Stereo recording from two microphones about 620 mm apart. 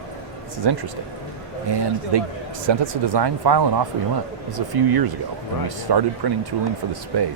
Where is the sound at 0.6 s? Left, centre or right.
Right.